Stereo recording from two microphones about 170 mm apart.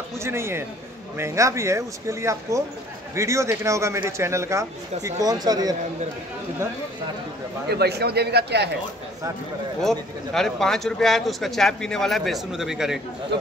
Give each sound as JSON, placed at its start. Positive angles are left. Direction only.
{"t": 0.2, "sound": "speech", "side_deg": -15}
{"t": 7.7, "sound": "speech", "side_deg": -70}
{"t": 9.8, "sound": "speech", "side_deg": 0}